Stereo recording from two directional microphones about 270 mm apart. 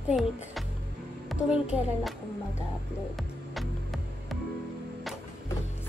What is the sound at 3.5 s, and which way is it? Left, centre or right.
Music, centre.